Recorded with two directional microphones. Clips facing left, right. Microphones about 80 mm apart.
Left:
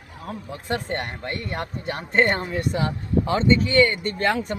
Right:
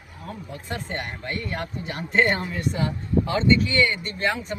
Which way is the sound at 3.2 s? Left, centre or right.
Left.